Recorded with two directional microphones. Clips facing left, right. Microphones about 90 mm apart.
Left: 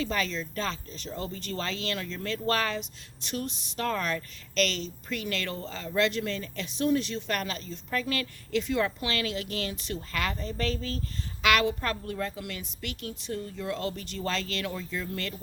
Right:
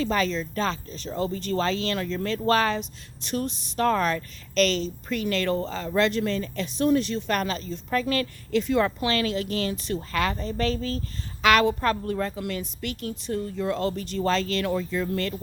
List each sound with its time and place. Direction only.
0.0 s speech: 40° right (ahead or behind)
14.7 s speech: 50° right (ahead or behind)